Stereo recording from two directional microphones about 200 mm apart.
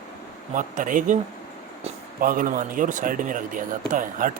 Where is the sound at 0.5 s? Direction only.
40° right (ahead or behind).